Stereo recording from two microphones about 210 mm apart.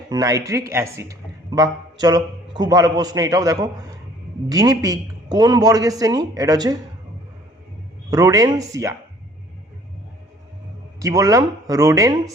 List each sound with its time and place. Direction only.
0.1 s a man's voice: 15° right (ahead or behind)
8.1 s a man's voice: 15° right (ahead or behind)
11.0 s a man's voice: 15° right (ahead or behind)